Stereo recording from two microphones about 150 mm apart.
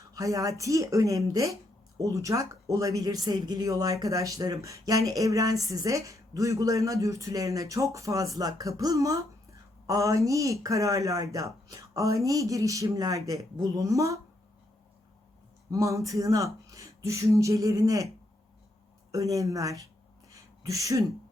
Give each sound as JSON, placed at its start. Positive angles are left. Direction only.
{"t": 0.1, "sound": "speech", "side_deg": -20}
{"t": 15.7, "sound": "speech", "side_deg": -20}
{"t": 19.1, "sound": "speech", "side_deg": -20}
{"t": 20.3, "sound": "a sound", "side_deg": -20}